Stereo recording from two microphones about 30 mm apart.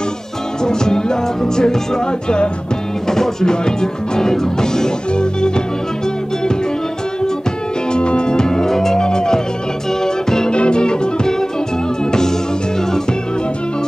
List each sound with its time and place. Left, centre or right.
0.7 s music: left
3.1 s music: centre
7.9 s music: left
10.0 s organ: left
10.5 s music: left
12.1 s music: centre